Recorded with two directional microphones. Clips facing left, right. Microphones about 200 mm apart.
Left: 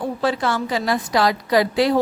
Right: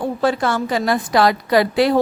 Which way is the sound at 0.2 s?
50° right (ahead or behind).